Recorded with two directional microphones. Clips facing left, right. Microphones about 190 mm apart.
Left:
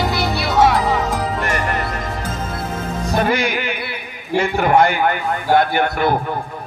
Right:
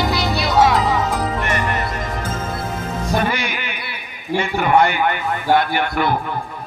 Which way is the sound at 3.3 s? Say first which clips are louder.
Left 5 dB; 45° left (ahead or behind).